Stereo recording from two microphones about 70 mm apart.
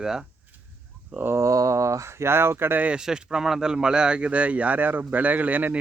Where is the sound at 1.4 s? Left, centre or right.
Right.